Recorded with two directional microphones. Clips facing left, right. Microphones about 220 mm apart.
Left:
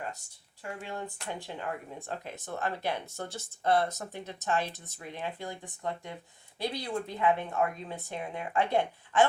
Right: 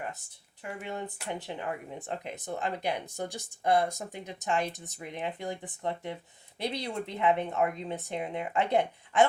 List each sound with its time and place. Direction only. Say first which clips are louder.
0.6 s a woman's voice: right 1 dB; 20° right (ahead or behind)
6.6 s a woman's voice: even; 20° right (ahead or behind)